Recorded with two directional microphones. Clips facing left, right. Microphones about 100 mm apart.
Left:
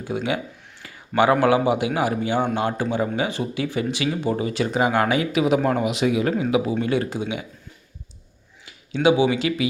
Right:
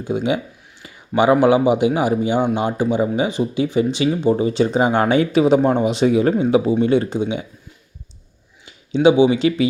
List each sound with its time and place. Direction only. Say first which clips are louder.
0.0 s speech: right 5 dB; 20° right (ahead or behind)
8.6 s speech: right 5 dB; 25° right (ahead or behind)